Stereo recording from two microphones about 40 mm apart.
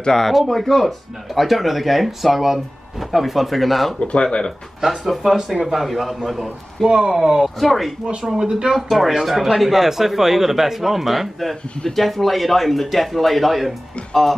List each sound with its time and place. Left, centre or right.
0.0 s speech: centre
4.0 s speech: left
4.8 s speech: centre
6.9 s speech: centre
7.5 s speech: centre
8.2 s speech: centre